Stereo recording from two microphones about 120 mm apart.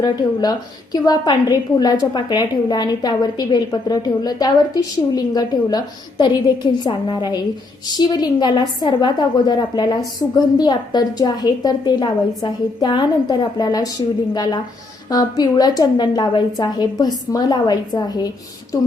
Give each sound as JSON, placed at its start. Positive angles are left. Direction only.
{"t": 0.0, "sound": "a woman's voice", "side_deg": 35}
{"t": 15.1, "sound": "a woman's voice", "side_deg": 30}